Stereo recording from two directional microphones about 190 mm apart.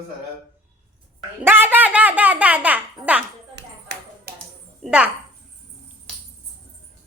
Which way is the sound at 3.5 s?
65° right (ahead or behind).